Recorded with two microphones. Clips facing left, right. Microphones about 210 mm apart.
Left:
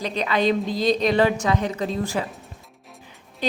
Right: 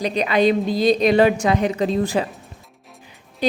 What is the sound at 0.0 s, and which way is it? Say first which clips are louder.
A woman's voice: right 4 dB; 15° right (ahead or behind).